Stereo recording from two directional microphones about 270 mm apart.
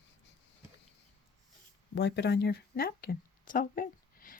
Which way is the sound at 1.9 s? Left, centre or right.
Left.